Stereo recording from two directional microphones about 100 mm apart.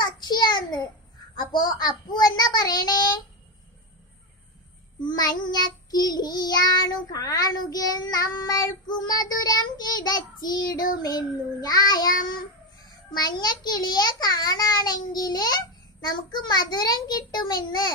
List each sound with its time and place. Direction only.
0.0 s a sound: 45° left (ahead or behind)
1.3 s a child's voice: 45° left (ahead or behind)
5.0 s child singing: 45° left (ahead or behind)
13.1 s a child's voice: 45° left (ahead or behind)